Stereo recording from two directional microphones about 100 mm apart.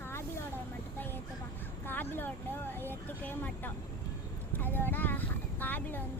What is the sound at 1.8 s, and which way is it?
Speech, 20° left (ahead or behind).